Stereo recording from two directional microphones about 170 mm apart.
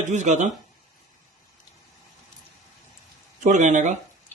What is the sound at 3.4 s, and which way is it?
Speech, 45° right (ahead or behind).